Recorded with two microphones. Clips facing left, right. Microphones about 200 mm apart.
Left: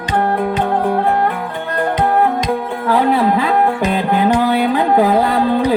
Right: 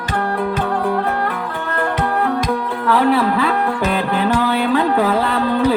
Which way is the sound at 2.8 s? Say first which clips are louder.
Left 1 dB; 20° left (ahead or behind).